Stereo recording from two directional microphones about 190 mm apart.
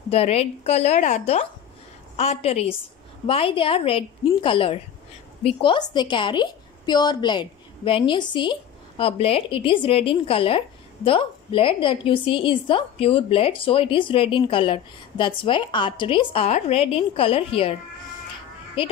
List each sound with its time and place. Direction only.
0.1 s a woman's voice: 30° left (ahead or behind)